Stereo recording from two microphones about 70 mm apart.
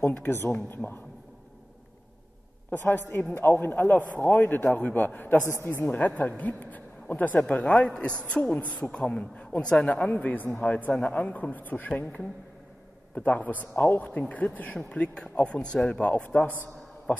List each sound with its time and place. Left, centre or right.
0.1 s a woman's voice: left
2.7 s a woman's voice: left
5.5 s a woman's voice: left
5.8 s a woman's voice: left
7.4 s a man's voice: centre